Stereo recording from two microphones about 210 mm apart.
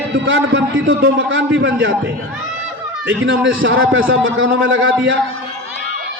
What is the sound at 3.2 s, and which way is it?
A man's voice, 65° right (ahead or behind).